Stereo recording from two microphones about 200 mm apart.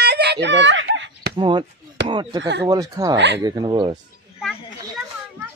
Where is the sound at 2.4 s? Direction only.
60° right (ahead or behind).